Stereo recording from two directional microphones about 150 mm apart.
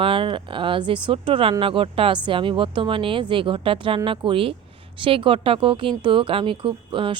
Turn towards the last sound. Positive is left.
turn(degrees=-35)  # may be behind; listen again after turning